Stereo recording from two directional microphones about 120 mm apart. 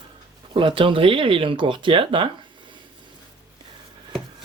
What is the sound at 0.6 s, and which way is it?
Speech, 45° right (ahead or behind).